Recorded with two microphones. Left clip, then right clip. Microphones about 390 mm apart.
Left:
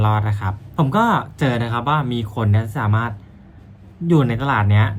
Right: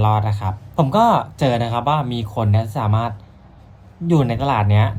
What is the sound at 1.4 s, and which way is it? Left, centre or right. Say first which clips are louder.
Speech: right 2 dB; centre.